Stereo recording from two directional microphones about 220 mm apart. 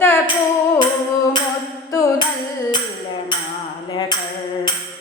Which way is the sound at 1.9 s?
15° left (ahead or behind).